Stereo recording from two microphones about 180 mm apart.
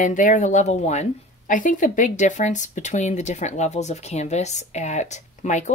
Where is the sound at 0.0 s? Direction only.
45° left (ahead or behind).